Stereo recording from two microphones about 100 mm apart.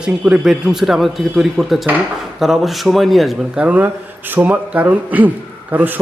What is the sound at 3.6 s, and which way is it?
Speech, 15° right (ahead or behind).